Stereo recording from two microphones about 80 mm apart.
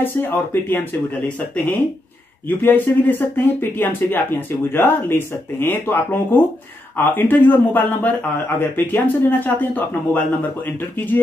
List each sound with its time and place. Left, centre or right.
0.0 s speech: left
2.4 s speech: left